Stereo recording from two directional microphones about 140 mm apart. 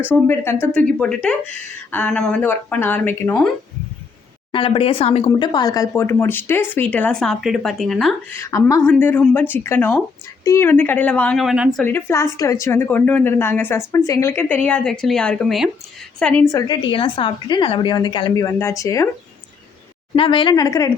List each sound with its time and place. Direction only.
0.1 s a woman's voice: 15° left (ahead or behind)
4.5 s a woman's voice: 40° left (ahead or behind)
5.5 s a woman's voice: 30° left (ahead or behind); by 8.1 s centre (ahead or behind)
8.4 s a woman's voice: 20° left (ahead or behind)
8.8 s a woman's voice: 10° left (ahead or behind)
11.4 s speech: 5° right (ahead or behind)
11.8 s a woman's voice: 15° left (ahead or behind)
16.5 s a woman's voice: 25° left (ahead or behind)
20.1 s a woman's voice: 35° left (ahead or behind)